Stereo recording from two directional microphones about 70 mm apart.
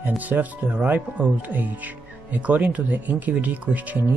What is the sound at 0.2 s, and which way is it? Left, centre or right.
Speech, right.